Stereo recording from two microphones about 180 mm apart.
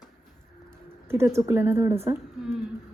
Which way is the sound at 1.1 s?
15° right (ahead or behind).